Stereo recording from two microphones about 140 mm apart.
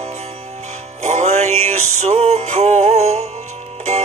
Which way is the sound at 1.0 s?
55° right (ahead or behind).